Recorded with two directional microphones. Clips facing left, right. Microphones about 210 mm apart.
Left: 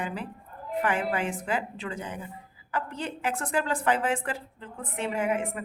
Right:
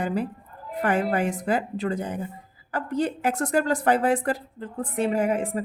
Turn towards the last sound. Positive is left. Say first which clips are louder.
# right 5 dB
turn(degrees=-35)  # may be behind; listen again after turning